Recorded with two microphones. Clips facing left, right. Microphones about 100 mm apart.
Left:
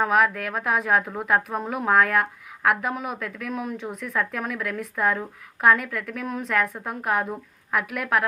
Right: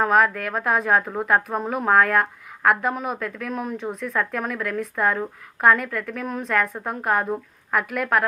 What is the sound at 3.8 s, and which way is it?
Speech, 15° right (ahead or behind).